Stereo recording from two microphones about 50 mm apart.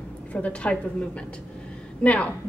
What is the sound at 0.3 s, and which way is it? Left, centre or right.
A woman's voice, left.